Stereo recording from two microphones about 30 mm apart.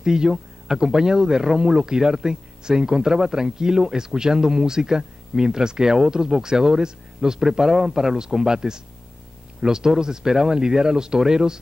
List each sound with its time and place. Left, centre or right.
0.0 s speech: right